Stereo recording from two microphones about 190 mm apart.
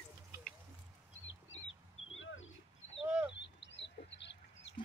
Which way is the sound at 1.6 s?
90° left.